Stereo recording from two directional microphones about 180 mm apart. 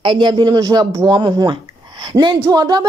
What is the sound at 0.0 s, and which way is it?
Speech, 25° right (ahead or behind).